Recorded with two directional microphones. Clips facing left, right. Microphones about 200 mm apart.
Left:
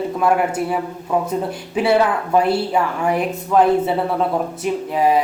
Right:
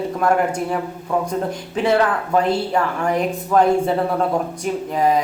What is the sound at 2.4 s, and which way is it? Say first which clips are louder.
Speech: left 1 dB; 10° left (ahead or behind).